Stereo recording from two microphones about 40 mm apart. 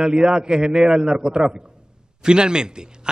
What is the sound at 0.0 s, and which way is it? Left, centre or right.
Speech, right.